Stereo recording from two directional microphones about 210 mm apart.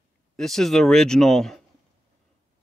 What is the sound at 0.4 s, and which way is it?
Speech, centre (ahead or behind).